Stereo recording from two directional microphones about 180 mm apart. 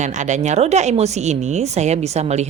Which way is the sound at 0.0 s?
40° right (ahead or behind).